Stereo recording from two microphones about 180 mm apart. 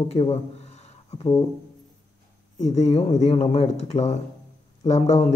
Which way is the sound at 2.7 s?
40° left (ahead or behind).